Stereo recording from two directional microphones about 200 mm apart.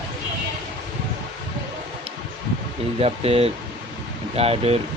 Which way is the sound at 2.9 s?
30° right (ahead or behind).